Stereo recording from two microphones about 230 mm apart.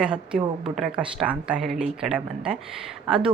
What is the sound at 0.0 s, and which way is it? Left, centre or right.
A woman's voice, centre.